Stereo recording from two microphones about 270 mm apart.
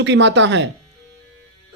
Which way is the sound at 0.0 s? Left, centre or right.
Right.